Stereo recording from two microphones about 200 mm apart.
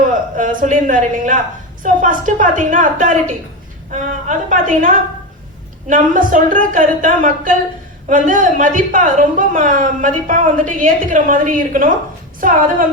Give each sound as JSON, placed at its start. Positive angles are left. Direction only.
{"t": 0.1, "sound": "a woman's voice", "side_deg": -40}